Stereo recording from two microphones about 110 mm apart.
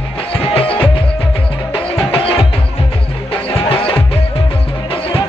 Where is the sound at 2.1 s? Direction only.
55° left (ahead or behind).